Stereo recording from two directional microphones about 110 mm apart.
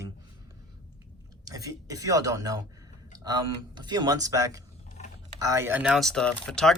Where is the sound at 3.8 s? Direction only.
40° right (ahead or behind).